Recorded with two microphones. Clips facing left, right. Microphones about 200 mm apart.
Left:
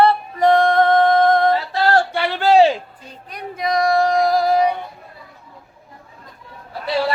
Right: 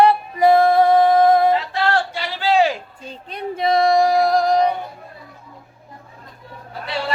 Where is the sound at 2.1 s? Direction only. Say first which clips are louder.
Left 5 dB; 60° left (ahead or behind).